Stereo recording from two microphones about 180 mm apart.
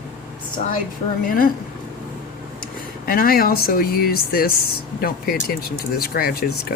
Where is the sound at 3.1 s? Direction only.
55° left (ahead or behind).